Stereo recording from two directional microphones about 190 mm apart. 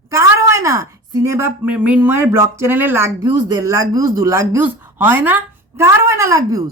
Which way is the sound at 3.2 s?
20° right (ahead or behind).